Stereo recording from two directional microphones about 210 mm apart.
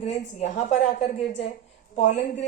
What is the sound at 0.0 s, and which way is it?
A woman's voice, 30° left (ahead or behind).